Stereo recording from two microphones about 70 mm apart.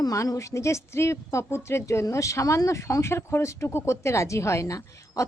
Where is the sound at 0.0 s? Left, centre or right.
Left.